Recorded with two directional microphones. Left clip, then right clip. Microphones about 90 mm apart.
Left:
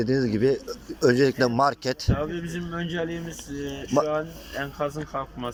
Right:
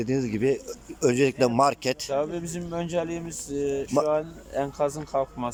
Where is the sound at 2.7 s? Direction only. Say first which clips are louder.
Right 2 dB; 55° right (ahead or behind).